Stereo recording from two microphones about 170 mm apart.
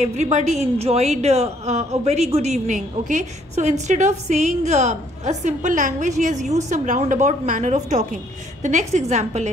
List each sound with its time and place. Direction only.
0.0 s a woman's voice: 45° right (ahead or behind)